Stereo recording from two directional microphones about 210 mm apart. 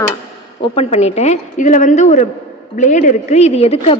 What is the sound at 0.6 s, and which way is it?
A woman's voice, 25° left (ahead or behind).